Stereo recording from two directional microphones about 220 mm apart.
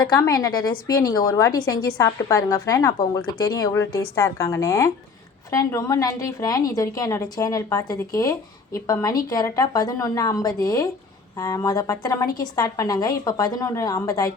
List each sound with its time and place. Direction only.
0.1 s a woman's voice: 15° left (ahead or behind)